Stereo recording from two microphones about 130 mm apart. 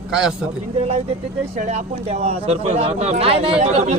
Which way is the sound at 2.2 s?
50° right (ahead or behind).